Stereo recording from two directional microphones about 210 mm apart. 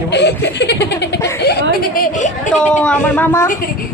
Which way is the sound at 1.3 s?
50° left (ahead or behind).